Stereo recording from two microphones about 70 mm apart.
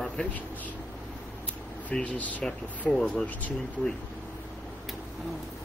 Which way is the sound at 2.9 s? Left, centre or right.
Centre.